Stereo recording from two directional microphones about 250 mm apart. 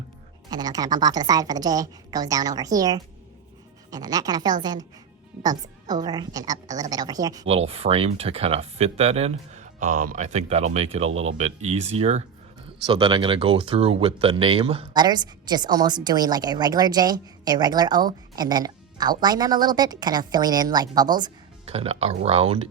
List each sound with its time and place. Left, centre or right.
0.5 s speech: centre
5.9 s speech: centre